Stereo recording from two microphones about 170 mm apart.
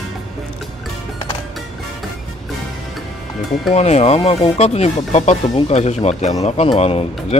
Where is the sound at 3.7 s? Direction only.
40° left (ahead or behind).